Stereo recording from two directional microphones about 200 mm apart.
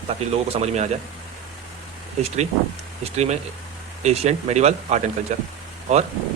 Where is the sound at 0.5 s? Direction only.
35° right (ahead or behind).